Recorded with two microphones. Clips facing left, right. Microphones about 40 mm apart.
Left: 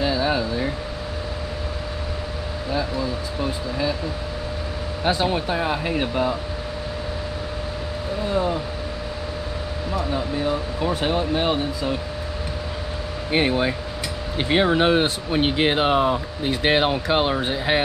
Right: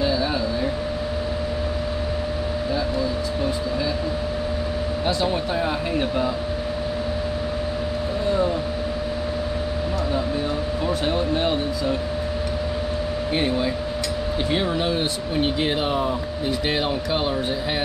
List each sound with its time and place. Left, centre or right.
0.0 s a sound: centre
5.0 s speech: left
10.8 s speech: centre
13.3 s speech: left